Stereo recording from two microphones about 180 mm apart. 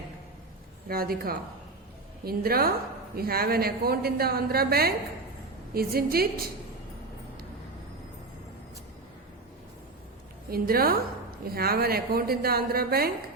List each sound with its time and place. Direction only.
0.9 s a woman's voice: 55° right (ahead or behind)
10.5 s a woman's voice: 55° right (ahead or behind)